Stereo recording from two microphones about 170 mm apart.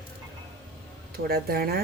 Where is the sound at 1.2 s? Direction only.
65° right (ahead or behind).